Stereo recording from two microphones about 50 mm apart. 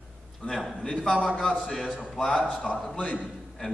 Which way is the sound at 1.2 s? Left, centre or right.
Centre.